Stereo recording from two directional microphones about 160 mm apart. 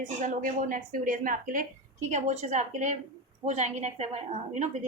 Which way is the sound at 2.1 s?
45° right (ahead or behind).